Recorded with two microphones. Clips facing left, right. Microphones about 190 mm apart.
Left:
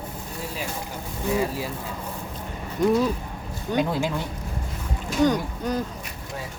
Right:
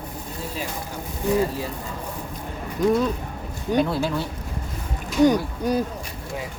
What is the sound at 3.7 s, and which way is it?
Speech, 15° left (ahead or behind).